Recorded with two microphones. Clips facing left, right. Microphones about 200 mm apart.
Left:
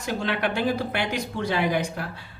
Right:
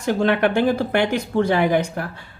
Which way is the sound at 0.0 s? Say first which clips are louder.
Right 8 dB; 50° right (ahead or behind).